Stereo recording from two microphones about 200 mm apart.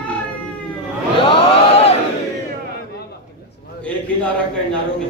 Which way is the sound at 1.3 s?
30° left (ahead or behind).